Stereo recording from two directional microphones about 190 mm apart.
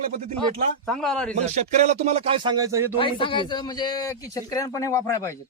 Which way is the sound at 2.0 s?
30° right (ahead or behind).